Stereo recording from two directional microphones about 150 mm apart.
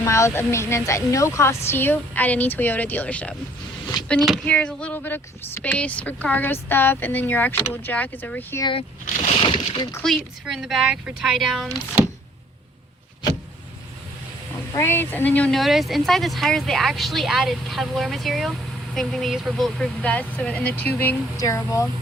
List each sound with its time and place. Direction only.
0.0 s speech: 20° left (ahead or behind)
4.4 s speech: 10° left (ahead or behind)
9.0 s speech: 50° left (ahead or behind); by 9.9 s 35° left (ahead or behind)
10.0 s speech: centre (ahead or behind)
14.7 s speech: 20° left (ahead or behind)